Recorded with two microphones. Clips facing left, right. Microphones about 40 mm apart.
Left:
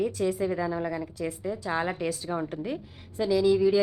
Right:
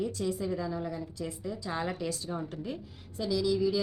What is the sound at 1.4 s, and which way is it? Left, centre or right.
Speech, left.